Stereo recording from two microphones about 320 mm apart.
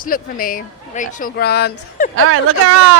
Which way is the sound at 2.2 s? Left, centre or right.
Right.